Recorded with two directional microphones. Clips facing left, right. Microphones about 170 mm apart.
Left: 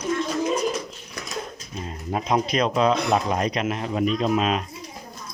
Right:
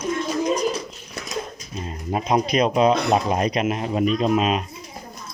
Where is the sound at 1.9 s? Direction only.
15° right (ahead or behind).